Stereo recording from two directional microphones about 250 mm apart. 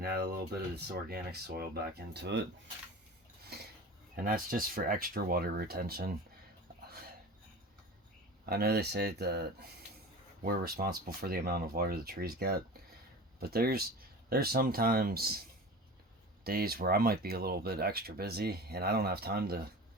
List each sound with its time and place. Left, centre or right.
0.0 s speech: right
3.5 s dishes: right
4.3 s speech: right
8.4 s speech: right
16.4 s speech: right